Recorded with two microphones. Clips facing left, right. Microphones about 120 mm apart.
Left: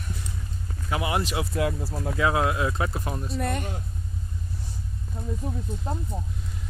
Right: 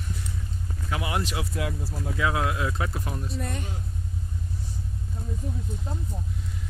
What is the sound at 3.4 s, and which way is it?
Speech, 65° left (ahead or behind).